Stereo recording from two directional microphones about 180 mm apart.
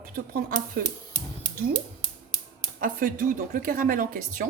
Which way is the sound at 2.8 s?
50° right (ahead or behind).